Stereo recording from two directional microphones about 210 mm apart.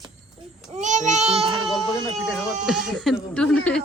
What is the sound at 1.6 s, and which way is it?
Speech, centre (ahead or behind).